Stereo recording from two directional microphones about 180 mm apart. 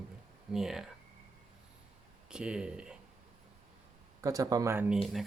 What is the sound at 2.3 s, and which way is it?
Speech, 5° right (ahead or behind).